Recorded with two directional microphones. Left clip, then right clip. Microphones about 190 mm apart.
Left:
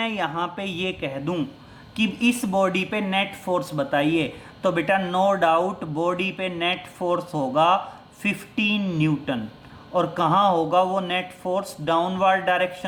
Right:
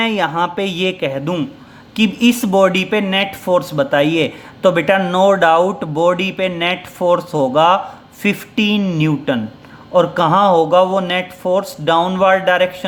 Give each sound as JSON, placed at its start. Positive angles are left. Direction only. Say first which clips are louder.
{"t": 0.0, "sound": "speech", "louder": "right 9 dB", "side_deg": -30}